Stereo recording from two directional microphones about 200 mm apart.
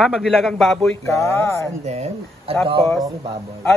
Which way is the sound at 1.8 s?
30° right (ahead or behind).